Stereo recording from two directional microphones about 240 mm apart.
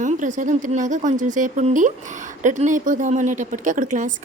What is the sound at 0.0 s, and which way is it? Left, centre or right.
A woman's voice, right.